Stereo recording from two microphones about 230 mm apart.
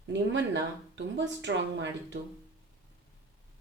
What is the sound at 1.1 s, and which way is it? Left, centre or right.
Speech, right.